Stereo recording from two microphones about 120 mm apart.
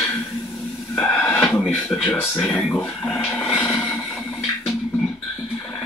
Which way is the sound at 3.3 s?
10° left (ahead or behind).